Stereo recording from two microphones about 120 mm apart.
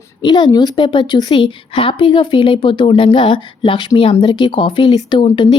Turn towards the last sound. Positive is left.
turn(degrees=45)  # may be behind; listen again after turning